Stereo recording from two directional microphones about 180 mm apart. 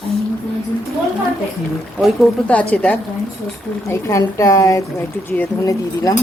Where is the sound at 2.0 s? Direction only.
5° left (ahead or behind).